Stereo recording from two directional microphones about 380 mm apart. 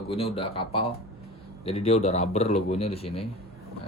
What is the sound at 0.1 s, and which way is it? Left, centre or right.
Speech, centre.